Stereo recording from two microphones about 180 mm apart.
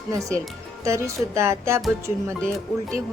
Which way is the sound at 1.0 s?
15° right (ahead or behind).